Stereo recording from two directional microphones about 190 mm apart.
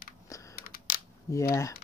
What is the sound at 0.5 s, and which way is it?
Crushing, 50° left (ahead or behind).